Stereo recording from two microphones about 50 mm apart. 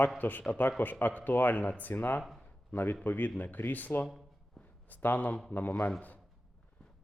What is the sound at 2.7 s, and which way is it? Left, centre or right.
Speech, left.